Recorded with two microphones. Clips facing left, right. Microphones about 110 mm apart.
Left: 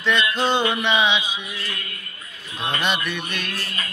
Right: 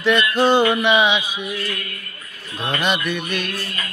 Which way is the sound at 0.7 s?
5° right (ahead or behind).